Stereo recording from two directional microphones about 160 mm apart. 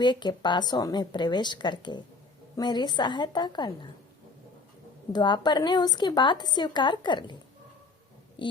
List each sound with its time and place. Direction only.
0.0 s a woman's voice: 30° left (ahead or behind)
5.1 s a woman's voice: 25° left (ahead or behind)
8.4 s a sound: 30° left (ahead or behind)